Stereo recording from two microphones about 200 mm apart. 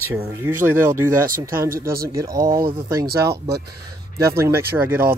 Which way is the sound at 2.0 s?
15° right (ahead or behind).